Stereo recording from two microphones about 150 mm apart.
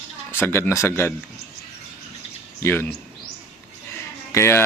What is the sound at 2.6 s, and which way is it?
Speech, 15° left (ahead or behind).